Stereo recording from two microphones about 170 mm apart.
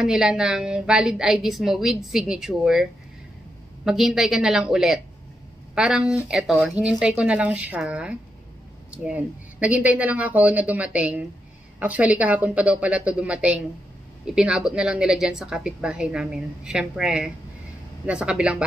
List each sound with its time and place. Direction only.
0.0 s a woman's voice: 5° right (ahead or behind)